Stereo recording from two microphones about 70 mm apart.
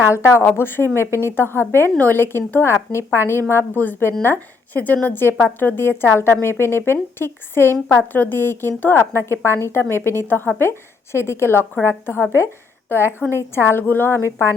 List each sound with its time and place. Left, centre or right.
0.1 s a woman's voice: left
13.0 s a woman's voice: right
13.3 s a woman's voice: left